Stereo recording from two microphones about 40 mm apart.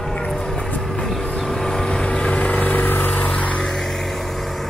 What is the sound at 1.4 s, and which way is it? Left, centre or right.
Vehicle, centre.